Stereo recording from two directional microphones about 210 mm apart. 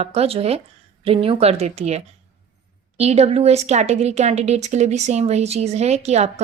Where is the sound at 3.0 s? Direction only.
30° right (ahead or behind).